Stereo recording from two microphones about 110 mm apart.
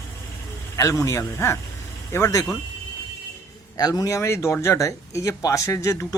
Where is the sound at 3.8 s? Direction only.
35° left (ahead or behind).